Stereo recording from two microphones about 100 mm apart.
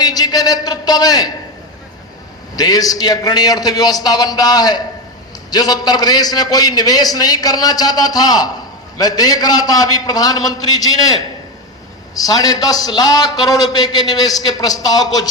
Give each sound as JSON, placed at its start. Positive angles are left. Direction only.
{"t": 0.0, "sound": "a man's voice", "side_deg": 40}
{"t": 2.6, "sound": "a man's voice", "side_deg": 40}